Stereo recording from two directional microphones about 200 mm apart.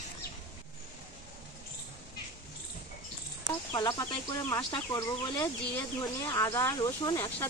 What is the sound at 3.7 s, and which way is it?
Speech, 20° left (ahead or behind).